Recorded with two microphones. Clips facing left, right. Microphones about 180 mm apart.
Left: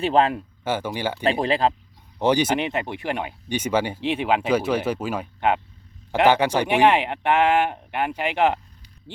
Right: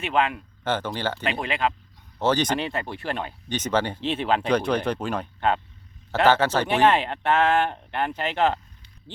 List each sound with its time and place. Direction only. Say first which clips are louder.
0.0 s speech: left 5 dB; 35° left (ahead or behind)
0.6 s speech: left 1 dB; 10° left (ahead or behind)
1.2 s speech: left 8 dB; 35° left (ahead or behind)
2.1 s speech: left 3 dB; 15° left (ahead or behind)